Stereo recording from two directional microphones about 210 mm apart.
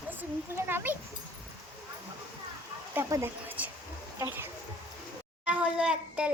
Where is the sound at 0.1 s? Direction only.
10° right (ahead or behind).